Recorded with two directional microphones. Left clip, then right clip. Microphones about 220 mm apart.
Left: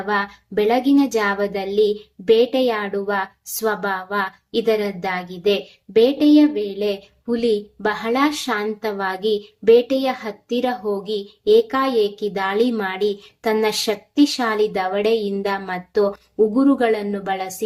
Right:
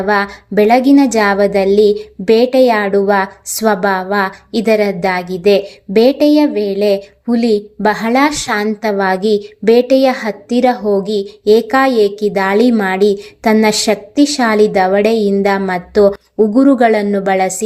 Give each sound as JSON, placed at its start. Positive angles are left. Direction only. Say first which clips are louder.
{"t": 0.0, "sound": "a woman's voice", "louder": "right 8 dB", "side_deg": -35}